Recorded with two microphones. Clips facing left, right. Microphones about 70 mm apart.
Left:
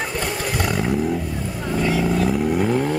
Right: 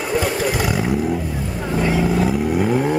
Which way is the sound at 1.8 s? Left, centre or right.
Centre.